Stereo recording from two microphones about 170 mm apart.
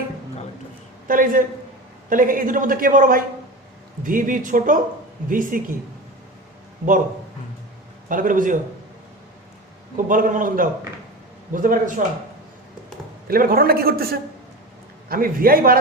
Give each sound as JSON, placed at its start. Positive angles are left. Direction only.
{"t": 1.0, "sound": "a man's voice", "side_deg": -55}
{"t": 8.1, "sound": "a man's voice", "side_deg": -50}
{"t": 10.1, "sound": "a man's voice", "side_deg": -55}
{"t": 13.2, "sound": "a man's voice", "side_deg": -60}